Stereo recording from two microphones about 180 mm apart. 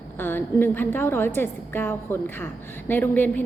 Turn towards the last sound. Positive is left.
turn(degrees=10)  # may be behind; listen again after turning